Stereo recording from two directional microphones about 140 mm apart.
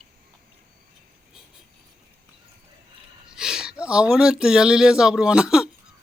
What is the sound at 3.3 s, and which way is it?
Speech, 5° right (ahead or behind).